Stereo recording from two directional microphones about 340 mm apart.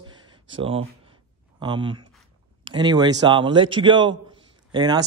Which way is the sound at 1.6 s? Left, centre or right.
Centre.